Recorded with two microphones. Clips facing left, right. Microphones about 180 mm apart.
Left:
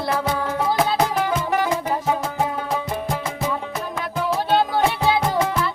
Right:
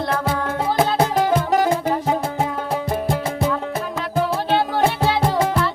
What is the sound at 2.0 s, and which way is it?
Music, 30° right (ahead or behind).